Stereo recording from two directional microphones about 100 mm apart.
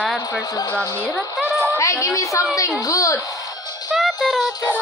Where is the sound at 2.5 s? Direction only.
35° left (ahead or behind).